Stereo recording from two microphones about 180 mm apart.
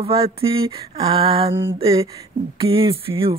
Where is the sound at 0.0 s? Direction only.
30° right (ahead or behind).